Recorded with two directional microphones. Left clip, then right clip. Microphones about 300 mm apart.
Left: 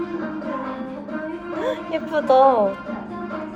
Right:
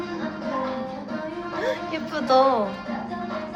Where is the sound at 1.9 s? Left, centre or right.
Centre.